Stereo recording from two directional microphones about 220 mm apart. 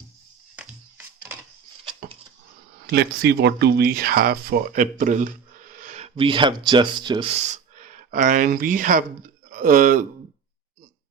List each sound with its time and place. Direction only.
0.5 s music: 10° right (ahead or behind)
2.0 s a sound: 40° right (ahead or behind)
2.9 s speech: 50° right (ahead or behind); by 7.3 s 20° right (ahead or behind)
7.5 s speech: 35° right (ahead or behind)